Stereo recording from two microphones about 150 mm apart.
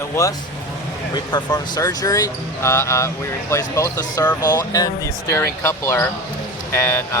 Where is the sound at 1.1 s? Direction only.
30° left (ahead or behind).